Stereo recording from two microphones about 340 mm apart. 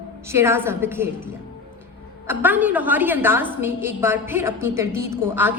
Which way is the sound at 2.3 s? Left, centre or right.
Centre.